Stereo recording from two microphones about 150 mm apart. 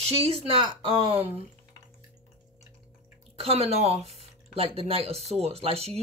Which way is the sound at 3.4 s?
40° right (ahead or behind).